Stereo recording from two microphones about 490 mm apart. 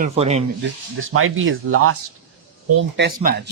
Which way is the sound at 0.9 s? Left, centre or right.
Right.